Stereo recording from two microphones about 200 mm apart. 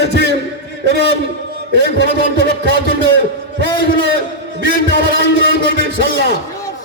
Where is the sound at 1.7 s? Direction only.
60° right (ahead or behind).